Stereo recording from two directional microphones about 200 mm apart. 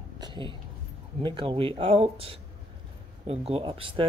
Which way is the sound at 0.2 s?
25° right (ahead or behind).